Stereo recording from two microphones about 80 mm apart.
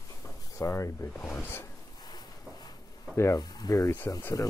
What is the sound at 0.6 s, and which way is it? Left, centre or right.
Speech, left.